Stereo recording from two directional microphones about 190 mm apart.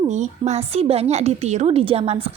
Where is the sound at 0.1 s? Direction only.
35° right (ahead or behind).